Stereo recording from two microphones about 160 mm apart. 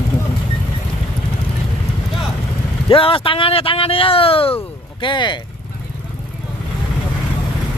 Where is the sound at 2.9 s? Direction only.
35° left (ahead or behind).